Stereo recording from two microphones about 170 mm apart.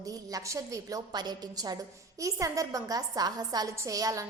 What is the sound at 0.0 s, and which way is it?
A woman's voice, 20° right (ahead or behind).